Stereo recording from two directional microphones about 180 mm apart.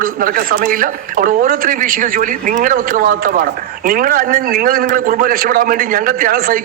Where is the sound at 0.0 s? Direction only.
50° right (ahead or behind).